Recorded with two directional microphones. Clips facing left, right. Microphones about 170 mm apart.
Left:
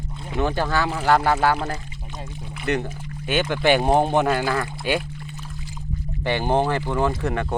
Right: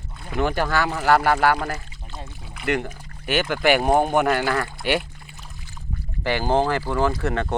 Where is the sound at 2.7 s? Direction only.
20° left (ahead or behind).